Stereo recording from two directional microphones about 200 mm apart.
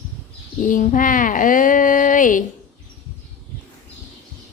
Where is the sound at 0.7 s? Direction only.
40° left (ahead or behind).